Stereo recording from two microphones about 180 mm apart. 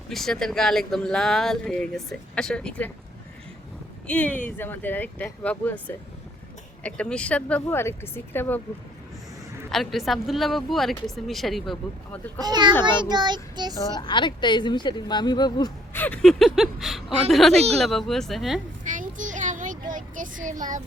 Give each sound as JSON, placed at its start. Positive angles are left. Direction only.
{"t": 0.1, "sound": "speech", "side_deg": 0}
{"t": 4.0, "sound": "speech", "side_deg": 10}
{"t": 6.8, "sound": "speech", "side_deg": 5}
{"t": 9.7, "sound": "speech", "side_deg": 0}
{"t": 12.4, "sound": "a child's voice", "side_deg": -25}
{"t": 13.7, "sound": "a woman's voice", "side_deg": 25}
{"t": 16.0, "sound": "speech", "side_deg": 5}
{"t": 18.9, "sound": "child singing", "side_deg": -45}